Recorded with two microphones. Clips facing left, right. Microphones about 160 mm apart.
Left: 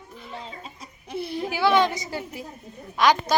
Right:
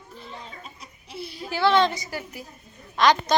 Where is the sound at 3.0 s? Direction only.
10° left (ahead or behind).